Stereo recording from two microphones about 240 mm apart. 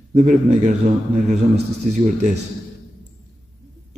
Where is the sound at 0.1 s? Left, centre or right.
Right.